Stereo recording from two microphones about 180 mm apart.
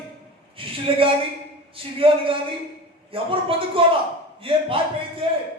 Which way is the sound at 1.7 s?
30° right (ahead or behind).